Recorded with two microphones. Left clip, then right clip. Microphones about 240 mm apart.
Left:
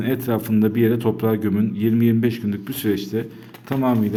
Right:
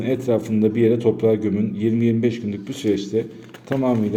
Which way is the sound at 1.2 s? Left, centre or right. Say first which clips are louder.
Right 3 dB; left.